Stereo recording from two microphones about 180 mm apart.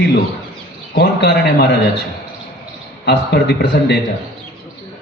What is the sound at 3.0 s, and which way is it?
Speech, 70° left (ahead or behind).